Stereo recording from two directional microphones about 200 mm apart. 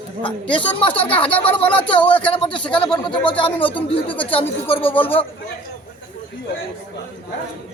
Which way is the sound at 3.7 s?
25° left (ahead or behind).